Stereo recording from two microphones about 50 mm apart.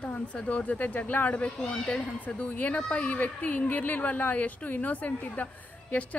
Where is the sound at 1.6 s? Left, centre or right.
Centre.